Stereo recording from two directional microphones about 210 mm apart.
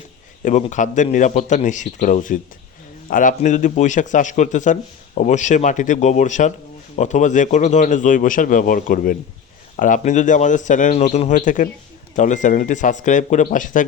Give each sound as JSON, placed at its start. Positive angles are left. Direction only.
{"t": 0.4, "sound": "speech", "side_deg": 35}